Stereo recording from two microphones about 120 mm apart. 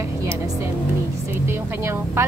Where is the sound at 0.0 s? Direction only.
25° right (ahead or behind).